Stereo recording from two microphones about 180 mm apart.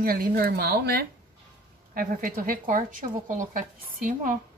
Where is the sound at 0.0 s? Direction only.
55° right (ahead or behind).